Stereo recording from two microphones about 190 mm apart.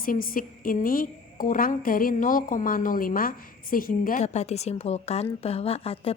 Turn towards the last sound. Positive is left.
turn(degrees=30)  # may be behind; listen again after turning